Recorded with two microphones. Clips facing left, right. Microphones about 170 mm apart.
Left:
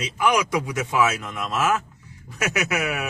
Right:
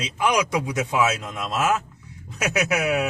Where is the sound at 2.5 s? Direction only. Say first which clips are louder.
Right 5 dB; 20° right (ahead or behind).